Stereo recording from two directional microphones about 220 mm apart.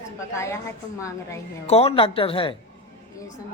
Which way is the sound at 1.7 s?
25° left (ahead or behind).